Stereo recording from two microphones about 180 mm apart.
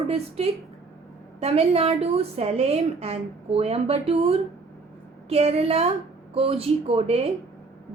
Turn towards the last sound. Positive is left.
turn(degrees=-35)  # may be behind; listen again after turning